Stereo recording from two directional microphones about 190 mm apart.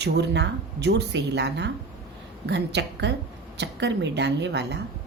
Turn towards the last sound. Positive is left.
turn(degrees=-65)  # may be behind; listen again after turning